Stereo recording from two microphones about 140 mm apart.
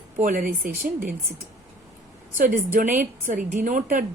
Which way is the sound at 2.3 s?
75° right (ahead or behind).